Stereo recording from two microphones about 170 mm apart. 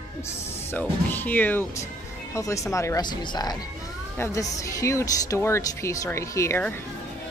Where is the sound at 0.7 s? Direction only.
10° left (ahead or behind).